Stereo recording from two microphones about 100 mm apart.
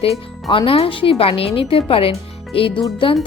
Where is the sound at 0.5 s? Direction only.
65° left (ahead or behind).